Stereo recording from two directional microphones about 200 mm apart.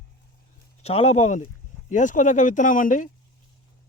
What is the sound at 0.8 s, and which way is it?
Speech, 30° left (ahead or behind).